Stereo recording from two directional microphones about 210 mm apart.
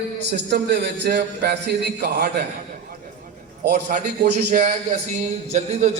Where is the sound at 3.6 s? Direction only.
40° right (ahead or behind).